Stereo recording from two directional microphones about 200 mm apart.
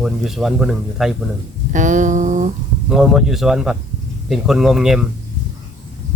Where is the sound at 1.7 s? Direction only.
40° right (ahead or behind).